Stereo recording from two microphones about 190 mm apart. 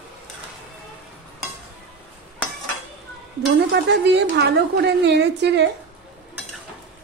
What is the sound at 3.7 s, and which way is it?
A woman's voice, 60° right (ahead or behind).